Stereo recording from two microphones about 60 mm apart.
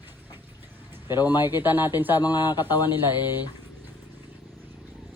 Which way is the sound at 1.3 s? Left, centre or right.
Right.